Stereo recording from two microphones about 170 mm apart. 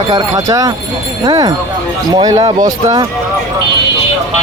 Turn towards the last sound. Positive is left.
turn(degrees=-20)  # may be behind; listen again after turning